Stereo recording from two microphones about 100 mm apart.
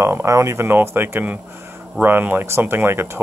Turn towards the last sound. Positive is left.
turn(degrees=-25)  # may be behind; listen again after turning